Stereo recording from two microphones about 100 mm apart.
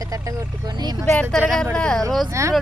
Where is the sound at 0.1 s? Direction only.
35° right (ahead or behind).